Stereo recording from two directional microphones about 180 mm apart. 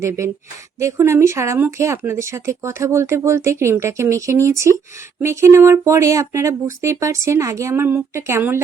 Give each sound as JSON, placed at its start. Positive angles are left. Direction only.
{"t": 0.0, "sound": "speech", "side_deg": -15}